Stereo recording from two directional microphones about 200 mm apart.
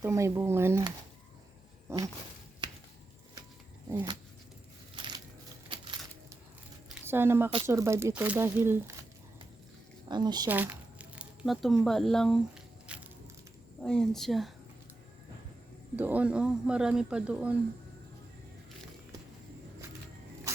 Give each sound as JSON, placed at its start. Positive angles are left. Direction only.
{"t": 0.0, "sound": "speech", "side_deg": -15}
{"t": 2.6, "sound": "a sound", "side_deg": -25}
{"t": 3.8, "sound": "speech", "side_deg": -20}
{"t": 4.9, "sound": "crushing", "side_deg": -20}
{"t": 5.6, "sound": "a sound", "side_deg": -25}
{"t": 7.0, "sound": "speech", "side_deg": -10}
{"t": 10.1, "sound": "speech", "side_deg": -20}
{"t": 10.5, "sound": "squish", "side_deg": -10}
{"t": 13.8, "sound": "a man's voice", "side_deg": 5}
{"t": 16.0, "sound": "a man's voice", "side_deg": -10}